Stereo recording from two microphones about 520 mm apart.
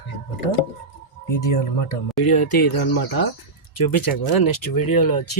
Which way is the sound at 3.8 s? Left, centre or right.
Left.